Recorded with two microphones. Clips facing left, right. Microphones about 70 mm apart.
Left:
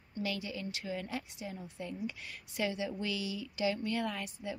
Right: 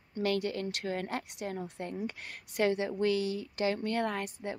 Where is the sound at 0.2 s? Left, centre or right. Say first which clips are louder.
Right 7 dB; right.